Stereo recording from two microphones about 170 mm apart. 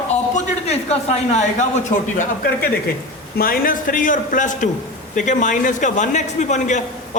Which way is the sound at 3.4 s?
55° left (ahead or behind).